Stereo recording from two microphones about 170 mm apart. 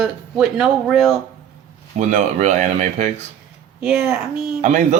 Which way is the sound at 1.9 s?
45° right (ahead or behind).